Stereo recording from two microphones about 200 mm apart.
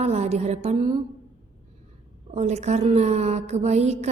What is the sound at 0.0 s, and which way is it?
Speech, 35° right (ahead or behind).